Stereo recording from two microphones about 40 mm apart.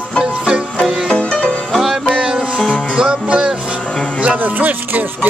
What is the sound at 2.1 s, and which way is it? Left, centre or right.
Music, right.